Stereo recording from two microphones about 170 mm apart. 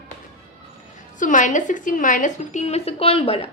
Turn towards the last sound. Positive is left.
turn(degrees=35)  # may be behind; listen again after turning